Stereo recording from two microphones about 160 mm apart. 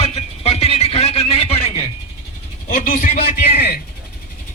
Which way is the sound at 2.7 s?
55° left (ahead or behind).